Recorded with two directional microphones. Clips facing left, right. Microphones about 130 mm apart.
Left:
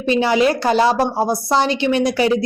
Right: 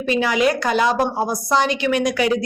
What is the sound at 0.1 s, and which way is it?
A woman's voice, 30° left (ahead or behind).